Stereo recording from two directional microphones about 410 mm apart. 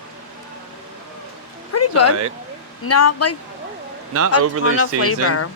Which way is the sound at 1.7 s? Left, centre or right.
Left.